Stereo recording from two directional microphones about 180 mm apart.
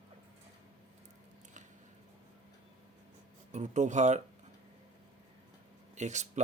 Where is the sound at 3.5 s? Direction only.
40° right (ahead or behind).